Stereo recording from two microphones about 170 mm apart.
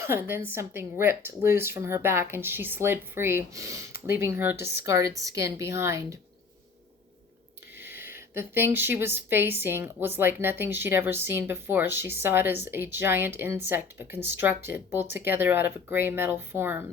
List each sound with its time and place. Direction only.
0.3 s a woman's voice: 15° right (ahead or behind)
7.8 s a woman's voice: 10° right (ahead or behind)